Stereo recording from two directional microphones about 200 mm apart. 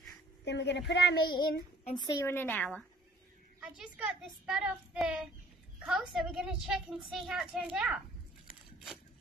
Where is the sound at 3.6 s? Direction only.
5° right (ahead or behind).